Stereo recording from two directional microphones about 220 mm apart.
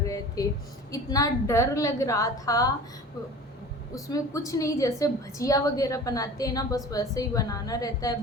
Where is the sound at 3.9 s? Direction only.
15° left (ahead or behind).